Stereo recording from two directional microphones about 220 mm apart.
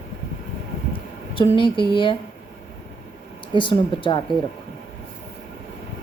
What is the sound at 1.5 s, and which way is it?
Speech, 20° left (ahead or behind).